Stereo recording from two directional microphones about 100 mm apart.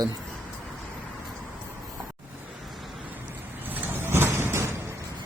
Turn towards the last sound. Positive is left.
turn(degrees=-25)  # may be behind; listen again after turning